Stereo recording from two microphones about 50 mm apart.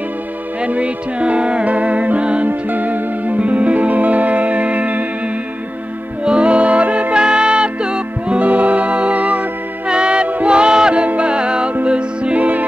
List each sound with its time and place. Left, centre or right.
0.6 s music: right
6.2 s music: right
8.4 s music: right
12.4 s music: right